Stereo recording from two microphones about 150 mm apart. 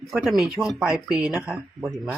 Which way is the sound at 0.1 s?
Centre (ahead or behind).